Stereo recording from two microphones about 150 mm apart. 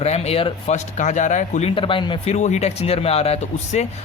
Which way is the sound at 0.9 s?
55° left (ahead or behind).